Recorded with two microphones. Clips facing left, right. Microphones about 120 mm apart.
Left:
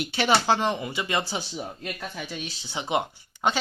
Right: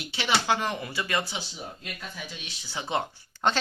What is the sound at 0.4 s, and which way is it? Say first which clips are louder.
Speech: left 4 dB; 30° left (ahead or behind).